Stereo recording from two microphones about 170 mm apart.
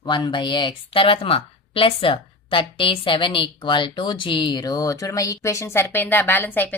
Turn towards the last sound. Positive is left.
turn(degrees=10)  # may be behind; listen again after turning